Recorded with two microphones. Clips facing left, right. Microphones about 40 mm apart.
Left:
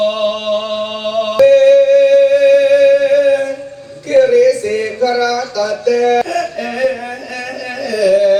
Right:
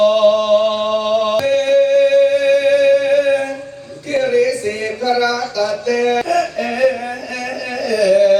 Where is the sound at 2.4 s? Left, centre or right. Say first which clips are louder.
Left 4 dB; centre.